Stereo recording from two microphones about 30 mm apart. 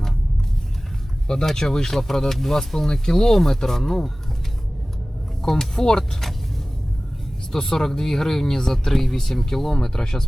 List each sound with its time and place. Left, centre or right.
1.5 s speech: centre
5.4 s speech: centre
7.5 s speech: centre